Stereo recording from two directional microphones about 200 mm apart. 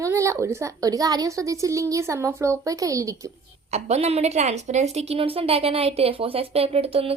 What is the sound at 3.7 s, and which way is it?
A woman's voice, 35° right (ahead or behind).